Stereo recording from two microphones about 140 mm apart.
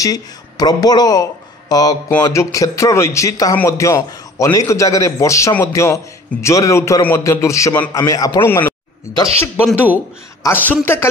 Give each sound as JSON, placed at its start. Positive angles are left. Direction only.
{"t": 0.0, "sound": "a man's voice", "side_deg": 25}
{"t": 8.5, "sound": "a man's voice", "side_deg": 15}
{"t": 10.5, "sound": "a man's voice", "side_deg": 15}